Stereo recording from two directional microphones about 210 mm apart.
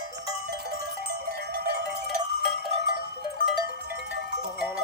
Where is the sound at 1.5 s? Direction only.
50° right (ahead or behind).